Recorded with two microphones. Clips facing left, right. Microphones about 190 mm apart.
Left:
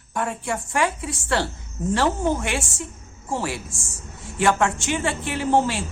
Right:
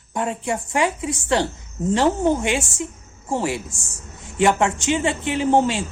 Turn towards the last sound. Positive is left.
turn(degrees=-15)  # may be behind; listen again after turning